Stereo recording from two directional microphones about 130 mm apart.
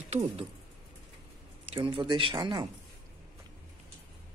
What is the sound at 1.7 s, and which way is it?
Speech, 40° right (ahead or behind).